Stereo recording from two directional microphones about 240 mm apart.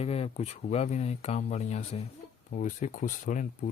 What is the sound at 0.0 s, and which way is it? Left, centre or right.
Speech, left.